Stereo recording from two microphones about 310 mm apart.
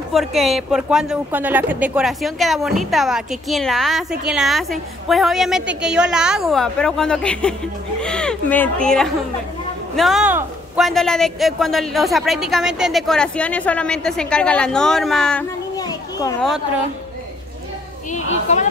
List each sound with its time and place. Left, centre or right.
0.1 s a man's voice: centre
18.1 s a woman's voice: left